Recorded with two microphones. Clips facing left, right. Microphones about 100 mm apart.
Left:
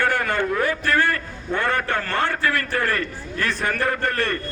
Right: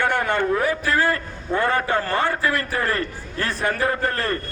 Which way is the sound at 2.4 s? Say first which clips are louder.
Even; 20° right (ahead or behind).